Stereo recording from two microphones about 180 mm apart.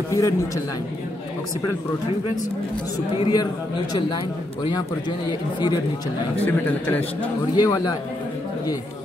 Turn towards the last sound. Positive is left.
turn(degrees=20)  # may be behind; listen again after turning